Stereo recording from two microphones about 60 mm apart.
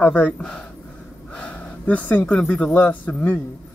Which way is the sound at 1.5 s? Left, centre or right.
Left.